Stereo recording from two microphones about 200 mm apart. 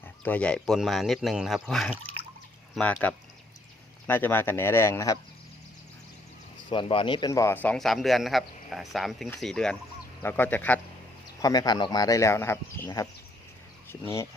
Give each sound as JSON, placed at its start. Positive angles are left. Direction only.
{"t": 0.3, "sound": "a man's voice", "side_deg": 5}
{"t": 3.0, "sound": "speech", "side_deg": 10}
{"t": 6.7, "sound": "a man's voice", "side_deg": 25}
{"t": 11.4, "sound": "speech", "side_deg": 20}